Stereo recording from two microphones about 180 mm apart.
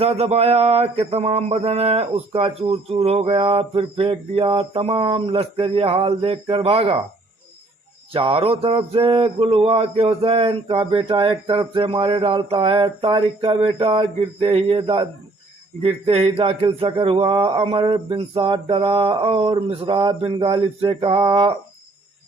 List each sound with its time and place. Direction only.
0.0 s mantra: 35° right (ahead or behind)
8.1 s mantra: 30° right (ahead or behind)